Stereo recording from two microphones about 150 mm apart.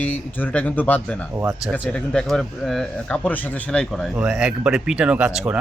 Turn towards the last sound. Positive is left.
turn(degrees=-5)  # may be behind; listen again after turning